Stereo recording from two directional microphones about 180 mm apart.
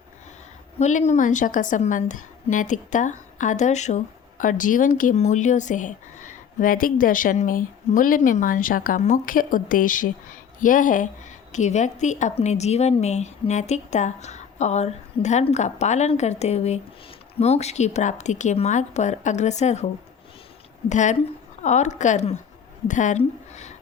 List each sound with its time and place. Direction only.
0.8 s a woman's voice: 40° left (ahead or behind)
20.9 s a woman's voice: 40° left (ahead or behind)